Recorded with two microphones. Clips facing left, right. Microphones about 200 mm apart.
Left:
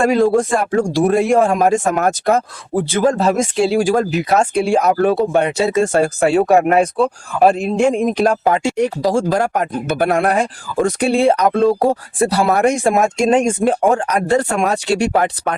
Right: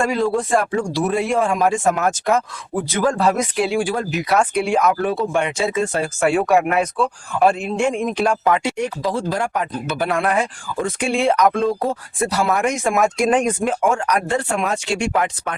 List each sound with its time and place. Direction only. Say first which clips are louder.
0.3 s speech: left 4 dB; 45° left (ahead or behind); by 3.8 s 25° left (ahead or behind)
3.8 s speech: left 6 dB; 40° left (ahead or behind)
4.3 s speech: left 1 dB; 30° left (ahead or behind); by 6.2 s 45° left (ahead or behind)
6.2 s speech: left 2 dB; 30° left (ahead or behind)